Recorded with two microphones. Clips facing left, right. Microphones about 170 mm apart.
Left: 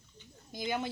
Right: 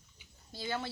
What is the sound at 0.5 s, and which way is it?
Speech, 15° left (ahead or behind).